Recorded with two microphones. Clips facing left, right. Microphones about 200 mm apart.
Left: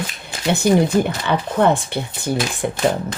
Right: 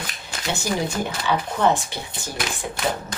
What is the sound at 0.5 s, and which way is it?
Speech, 60° left (ahead or behind).